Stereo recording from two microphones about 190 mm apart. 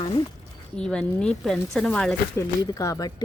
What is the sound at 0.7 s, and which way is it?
Speech, 5° left (ahead or behind).